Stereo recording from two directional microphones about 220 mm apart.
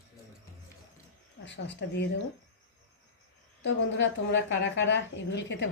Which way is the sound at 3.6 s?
55° left (ahead or behind).